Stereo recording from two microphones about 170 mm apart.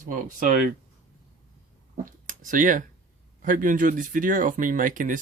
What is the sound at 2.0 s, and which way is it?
Speech, 50° right (ahead or behind).